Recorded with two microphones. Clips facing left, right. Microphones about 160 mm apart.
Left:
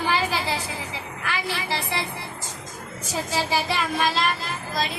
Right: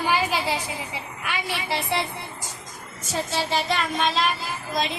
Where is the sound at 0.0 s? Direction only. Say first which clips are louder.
Right 1 dB; 15° right (ahead or behind).